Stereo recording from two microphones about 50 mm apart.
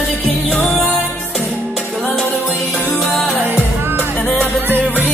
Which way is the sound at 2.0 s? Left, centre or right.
Centre.